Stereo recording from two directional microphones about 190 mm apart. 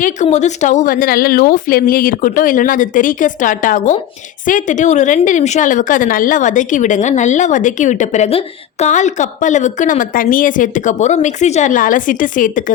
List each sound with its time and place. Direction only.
0.0 s a woman's voice: 40° left (ahead or behind)